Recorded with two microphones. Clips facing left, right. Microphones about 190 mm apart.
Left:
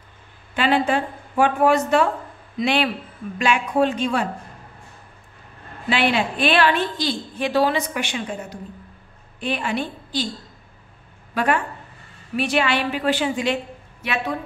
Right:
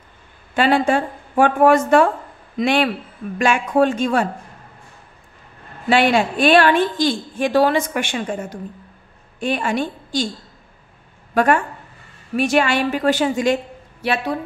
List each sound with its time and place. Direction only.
0.6 s a woman's voice: 45° right (ahead or behind)
5.9 s a woman's voice: 45° right (ahead or behind)
11.3 s a woman's voice: 45° right (ahead or behind)